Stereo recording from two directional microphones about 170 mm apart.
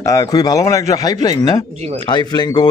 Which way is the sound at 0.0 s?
20° left (ahead or behind).